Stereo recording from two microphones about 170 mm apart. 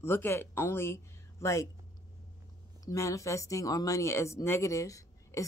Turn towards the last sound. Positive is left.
turn(degrees=20)  # may be behind; listen again after turning